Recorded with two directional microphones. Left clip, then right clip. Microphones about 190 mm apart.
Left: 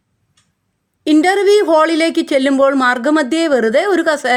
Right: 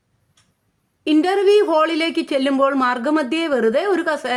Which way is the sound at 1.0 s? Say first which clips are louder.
Left 5 dB; 20° left (ahead or behind).